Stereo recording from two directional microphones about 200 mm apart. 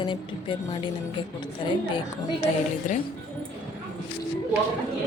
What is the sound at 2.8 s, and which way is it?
Speech, 35° left (ahead or behind).